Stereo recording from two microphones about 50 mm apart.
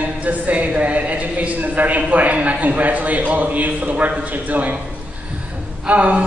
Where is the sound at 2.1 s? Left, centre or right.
Right.